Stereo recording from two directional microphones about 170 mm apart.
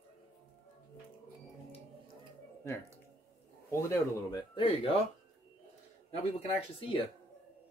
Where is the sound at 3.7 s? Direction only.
15° left (ahead or behind).